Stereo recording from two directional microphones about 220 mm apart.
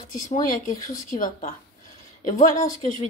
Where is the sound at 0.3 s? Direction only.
35° left (ahead or behind).